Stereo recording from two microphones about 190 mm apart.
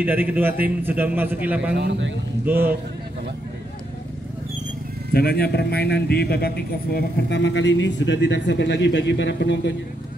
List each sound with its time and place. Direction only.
0.0 s a man's voice: 10° right (ahead or behind)
1.8 s a man's voice: 70° right (ahead or behind)
2.4 s a man's voice: 10° right (ahead or behind)
5.1 s a man's voice: 55° left (ahead or behind)